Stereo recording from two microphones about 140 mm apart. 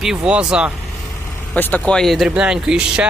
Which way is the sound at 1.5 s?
10° left (ahead or behind).